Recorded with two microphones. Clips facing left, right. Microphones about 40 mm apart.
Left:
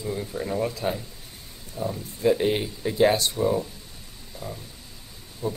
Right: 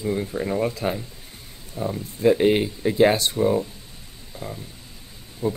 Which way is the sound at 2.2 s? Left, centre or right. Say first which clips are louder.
Right 4 dB; right.